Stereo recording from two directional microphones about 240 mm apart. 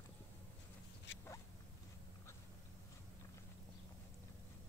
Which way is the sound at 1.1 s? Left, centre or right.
Left.